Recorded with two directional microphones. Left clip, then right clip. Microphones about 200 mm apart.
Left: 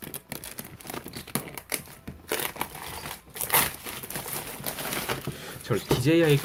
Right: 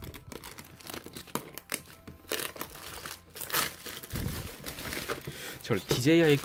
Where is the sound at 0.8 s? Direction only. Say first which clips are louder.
Left 4 dB; 15° right (ahead or behind).